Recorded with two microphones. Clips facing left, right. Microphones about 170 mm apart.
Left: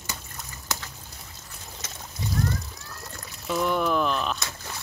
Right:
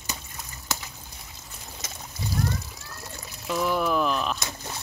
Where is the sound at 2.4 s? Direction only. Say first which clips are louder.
Left 1 dB; centre (ahead or behind).